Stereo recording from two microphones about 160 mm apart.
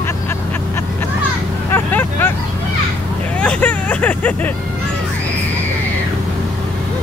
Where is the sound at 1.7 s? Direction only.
15° left (ahead or behind).